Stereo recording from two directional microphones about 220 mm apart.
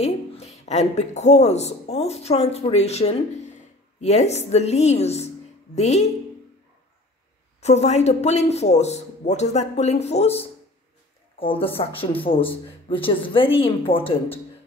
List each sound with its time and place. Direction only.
0.0 s speech: 30° left (ahead or behind)
7.6 s speech: 30° left (ahead or behind)